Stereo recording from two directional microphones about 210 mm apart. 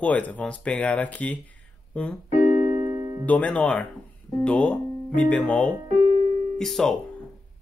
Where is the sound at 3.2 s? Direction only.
5° left (ahead or behind).